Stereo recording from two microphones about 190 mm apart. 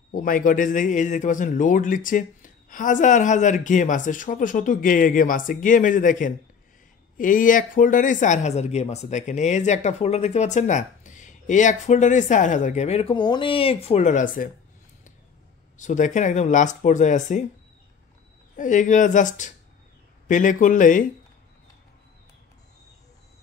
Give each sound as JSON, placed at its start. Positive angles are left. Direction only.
{"t": 0.1, "sound": "a man's voice", "side_deg": 45}
{"t": 15.8, "sound": "speech", "side_deg": 40}
{"t": 18.6, "sound": "a man's voice", "side_deg": 40}